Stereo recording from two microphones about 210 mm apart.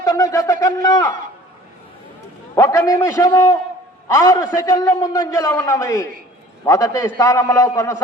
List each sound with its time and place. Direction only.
0.0 s a man's voice: 15° left (ahead or behind)
2.6 s a man's voice: 15° left (ahead or behind)